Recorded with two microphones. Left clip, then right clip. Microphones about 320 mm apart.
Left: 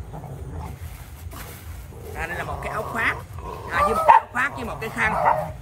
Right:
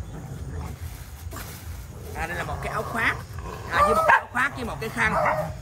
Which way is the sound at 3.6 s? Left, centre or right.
Centre.